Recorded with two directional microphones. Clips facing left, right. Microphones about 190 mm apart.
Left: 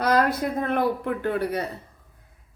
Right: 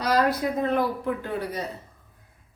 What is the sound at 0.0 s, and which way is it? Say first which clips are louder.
A woman's voice: left 1 dB; 55° left (ahead or behind).